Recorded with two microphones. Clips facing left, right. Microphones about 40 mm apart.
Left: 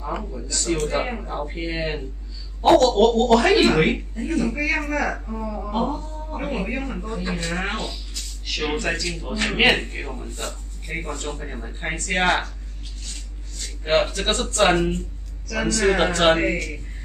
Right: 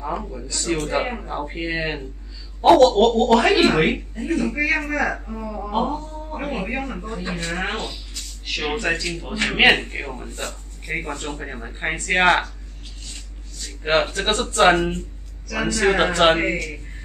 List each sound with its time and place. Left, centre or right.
0.2 s a man's voice: centre
4.7 s a man's voice: centre
9.1 s speech: right
13.8 s a man's voice: centre